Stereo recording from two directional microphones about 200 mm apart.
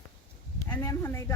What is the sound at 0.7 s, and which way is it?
Speech, 10° left (ahead or behind).